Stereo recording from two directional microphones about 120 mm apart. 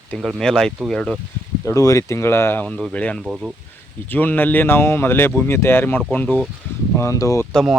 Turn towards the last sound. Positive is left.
turn(degrees=5)  # may be behind; listen again after turning